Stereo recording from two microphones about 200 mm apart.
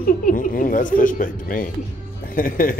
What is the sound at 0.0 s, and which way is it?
Speech, 45° left (ahead or behind).